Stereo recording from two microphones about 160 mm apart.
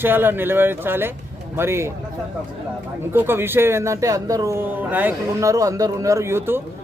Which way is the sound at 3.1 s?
15° right (ahead or behind).